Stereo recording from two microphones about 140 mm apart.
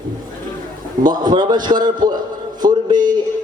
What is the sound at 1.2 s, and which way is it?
A man's voice, 30° right (ahead or behind).